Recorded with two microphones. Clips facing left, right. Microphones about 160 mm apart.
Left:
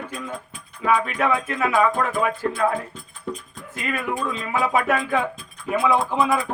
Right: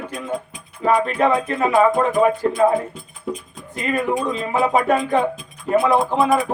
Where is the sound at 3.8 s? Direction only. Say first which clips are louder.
Right 5 dB; 35° right (ahead or behind); by 6.2 s 20° right (ahead or behind).